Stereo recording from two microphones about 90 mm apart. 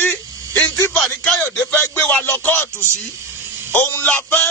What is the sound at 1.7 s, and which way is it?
Music, 15° left (ahead or behind).